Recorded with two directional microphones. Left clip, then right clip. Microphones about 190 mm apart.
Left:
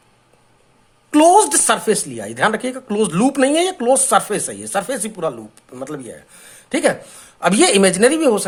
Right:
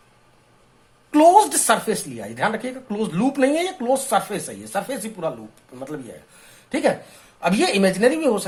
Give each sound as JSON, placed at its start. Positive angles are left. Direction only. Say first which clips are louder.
{"t": 1.1, "sound": "speech", "louder": "left 2 dB", "side_deg": 45}